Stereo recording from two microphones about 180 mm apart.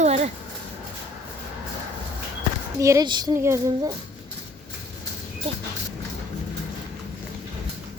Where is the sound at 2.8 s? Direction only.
20° right (ahead or behind).